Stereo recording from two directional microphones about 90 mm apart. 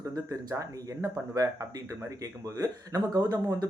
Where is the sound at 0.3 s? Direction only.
35° right (ahead or behind).